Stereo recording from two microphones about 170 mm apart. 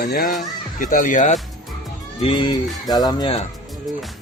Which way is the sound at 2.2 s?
30° left (ahead or behind).